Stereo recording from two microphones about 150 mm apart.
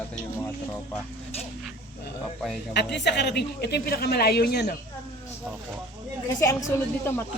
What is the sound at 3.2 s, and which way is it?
A man's voice, 90° left.